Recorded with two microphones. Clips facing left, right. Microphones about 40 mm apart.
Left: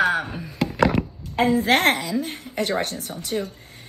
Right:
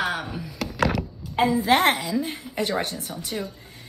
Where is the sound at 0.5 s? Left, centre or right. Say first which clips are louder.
Left 4 dB; left.